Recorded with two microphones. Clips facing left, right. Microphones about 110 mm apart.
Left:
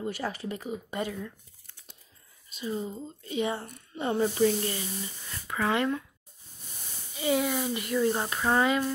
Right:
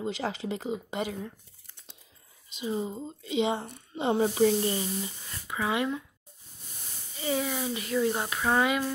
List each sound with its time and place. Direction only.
0.0 s speech: 20° right (ahead or behind)
2.5 s speech: 20° right (ahead or behind)
7.2 s speech: 5° left (ahead or behind)